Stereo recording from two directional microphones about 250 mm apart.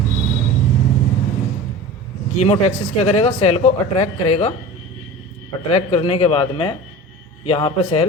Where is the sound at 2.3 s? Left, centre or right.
Left.